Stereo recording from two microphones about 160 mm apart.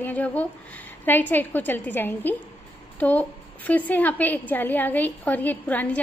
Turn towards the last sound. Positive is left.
turn(degrees=10)  # may be behind; listen again after turning